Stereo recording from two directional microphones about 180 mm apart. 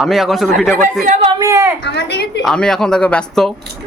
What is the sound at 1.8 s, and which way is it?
Speech, 70° left (ahead or behind).